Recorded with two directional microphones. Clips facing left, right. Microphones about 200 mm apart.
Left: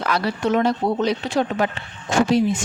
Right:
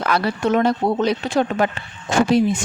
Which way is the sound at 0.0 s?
55° right (ahead or behind).